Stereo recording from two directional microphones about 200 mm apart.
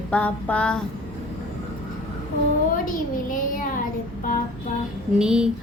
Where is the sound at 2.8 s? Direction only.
45° left (ahead or behind).